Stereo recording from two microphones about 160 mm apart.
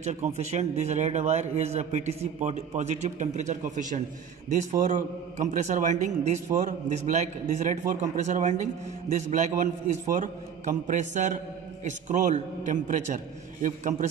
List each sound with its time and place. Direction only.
0.0 s a man's voice: 50° right (ahead or behind)